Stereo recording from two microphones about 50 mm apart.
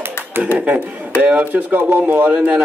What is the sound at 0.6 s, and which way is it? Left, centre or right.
A man's voice, right.